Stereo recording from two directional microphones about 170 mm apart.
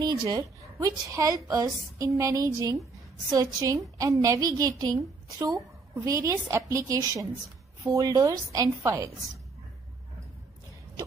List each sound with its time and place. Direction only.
0.0 s a woman's voice: 25° right (ahead or behind)